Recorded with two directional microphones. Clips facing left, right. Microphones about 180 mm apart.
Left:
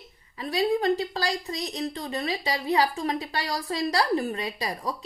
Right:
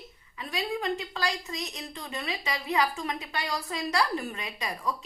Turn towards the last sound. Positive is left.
turn(degrees=35)  # may be behind; listen again after turning